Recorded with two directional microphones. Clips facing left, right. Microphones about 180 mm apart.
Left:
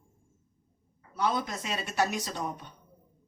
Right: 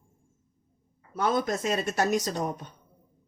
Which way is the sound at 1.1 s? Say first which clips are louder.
Right 4 dB; 50° right (ahead or behind).